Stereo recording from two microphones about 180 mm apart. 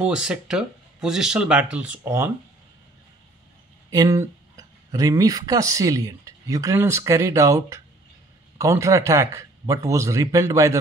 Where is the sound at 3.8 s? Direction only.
20° right (ahead or behind).